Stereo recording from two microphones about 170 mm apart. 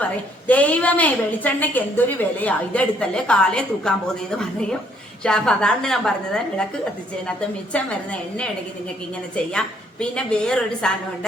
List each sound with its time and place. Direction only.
0.4 s a woman's voice: 10° left (ahead or behind)
9.3 s a woman's voice: 5° left (ahead or behind)